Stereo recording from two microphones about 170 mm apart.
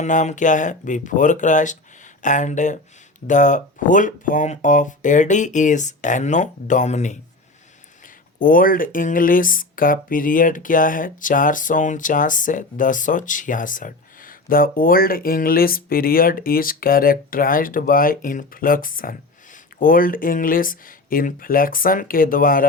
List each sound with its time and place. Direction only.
0.0 s speech: 45° left (ahead or behind)
8.4 s speech: 55° left (ahead or behind)